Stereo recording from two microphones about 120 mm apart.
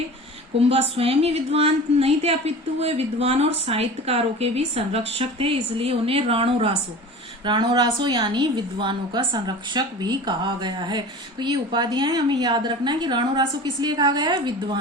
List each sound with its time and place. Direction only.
0.7 s a woman's voice: 55° right (ahead or behind)
7.4 s a woman's voice: 40° right (ahead or behind)